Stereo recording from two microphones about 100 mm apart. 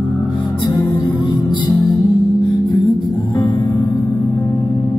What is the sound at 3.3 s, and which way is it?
Music, 50° left (ahead or behind).